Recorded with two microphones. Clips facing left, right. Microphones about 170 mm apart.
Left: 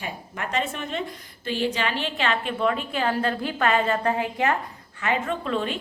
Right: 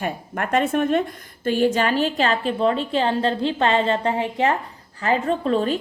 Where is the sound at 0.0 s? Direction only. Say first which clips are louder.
Right 7 dB; 50° right (ahead or behind).